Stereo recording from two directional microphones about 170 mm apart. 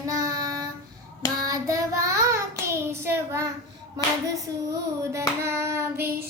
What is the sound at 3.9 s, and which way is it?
Clapping, 20° right (ahead or behind).